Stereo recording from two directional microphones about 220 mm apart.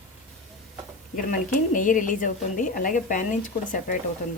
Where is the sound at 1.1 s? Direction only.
35° left (ahead or behind).